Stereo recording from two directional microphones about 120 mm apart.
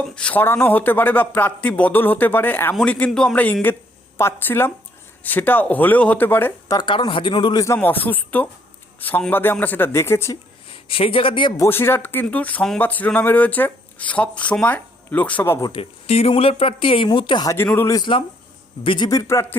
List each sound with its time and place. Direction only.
0.0 s speech: 10° left (ahead or behind)
6.7 s speech: 40° left (ahead or behind)
7.8 s speech: 15° left (ahead or behind)
10.8 s speech: 50° left (ahead or behind)
11.5 s speech: 20° left (ahead or behind)
15.6 s speech: 40° left (ahead or behind)
16.0 s a man's voice: 60° left (ahead or behind); by 17.4 s 40° left (ahead or behind)
17.4 s a man's voice: 25° left (ahead or behind)
18.8 s a man's voice: 45° left (ahead or behind)
19.3 s speech: 25° left (ahead or behind)